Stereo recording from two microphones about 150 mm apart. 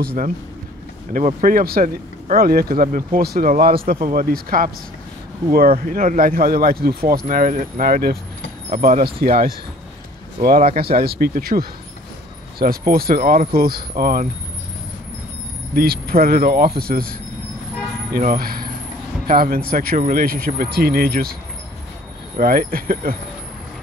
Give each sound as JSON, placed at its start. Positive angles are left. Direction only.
{"t": 1.1, "sound": "speech", "side_deg": -65}
{"t": 7.2, "sound": "speech", "side_deg": -70}
{"t": 8.6, "sound": "speech", "side_deg": -60}
{"t": 9.2, "sound": "speech", "side_deg": -80}
{"t": 10.8, "sound": "speech", "side_deg": -90}
{"t": 15.7, "sound": "speech", "side_deg": -80}
{"t": 18.1, "sound": "speech", "side_deg": -75}
{"t": 22.4, "sound": "speech", "side_deg": -75}